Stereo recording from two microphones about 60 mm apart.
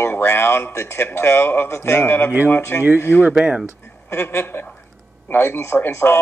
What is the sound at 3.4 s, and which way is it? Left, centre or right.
Speech, centre.